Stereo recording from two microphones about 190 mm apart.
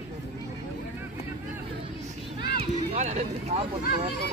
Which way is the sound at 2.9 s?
35° right (ahead or behind).